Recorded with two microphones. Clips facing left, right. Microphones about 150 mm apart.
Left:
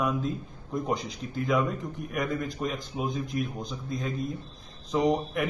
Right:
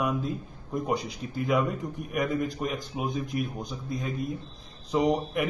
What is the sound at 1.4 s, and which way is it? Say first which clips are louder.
A man's voice: right 1 dB; 10° right (ahead or behind).